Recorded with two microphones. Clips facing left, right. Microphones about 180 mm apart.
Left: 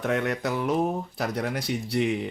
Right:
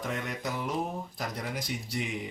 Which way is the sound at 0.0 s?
65° left (ahead or behind).